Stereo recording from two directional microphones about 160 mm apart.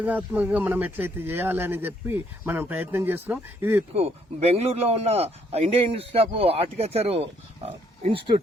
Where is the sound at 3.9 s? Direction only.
40° right (ahead or behind).